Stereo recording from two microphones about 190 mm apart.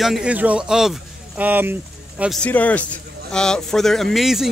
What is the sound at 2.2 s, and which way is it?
Speech, 5° left (ahead or behind).